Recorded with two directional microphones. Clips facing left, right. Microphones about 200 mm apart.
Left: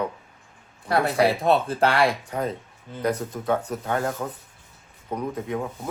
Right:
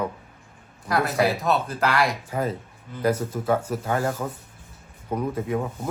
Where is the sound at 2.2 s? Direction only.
5° right (ahead or behind).